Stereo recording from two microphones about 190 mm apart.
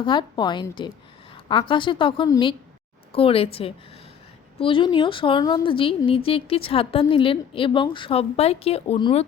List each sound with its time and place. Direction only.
0.0 s speech: 25° left (ahead or behind)